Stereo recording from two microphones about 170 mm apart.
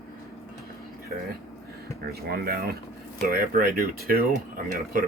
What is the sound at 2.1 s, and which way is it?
Speech, 65° right (ahead or behind).